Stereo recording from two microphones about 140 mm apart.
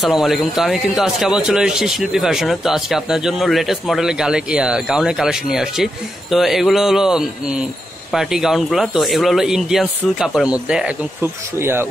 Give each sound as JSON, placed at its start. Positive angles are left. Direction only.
{"t": 0.0, "sound": "speech", "side_deg": 0}